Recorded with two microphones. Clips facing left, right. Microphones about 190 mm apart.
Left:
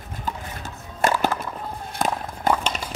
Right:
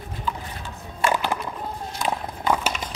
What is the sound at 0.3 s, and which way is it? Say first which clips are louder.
Liquid: right 1 dB; 40° left (ahead or behind).